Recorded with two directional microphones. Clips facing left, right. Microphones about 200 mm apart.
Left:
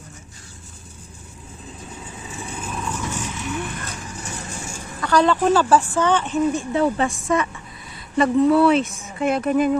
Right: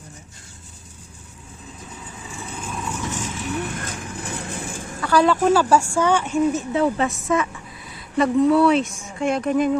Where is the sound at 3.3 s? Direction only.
35° right (ahead or behind); by 4.9 s 55° right (ahead or behind).